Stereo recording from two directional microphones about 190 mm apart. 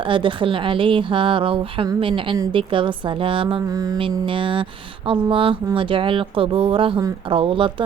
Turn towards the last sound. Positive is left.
turn(degrees=-30)  # may be behind; listen again after turning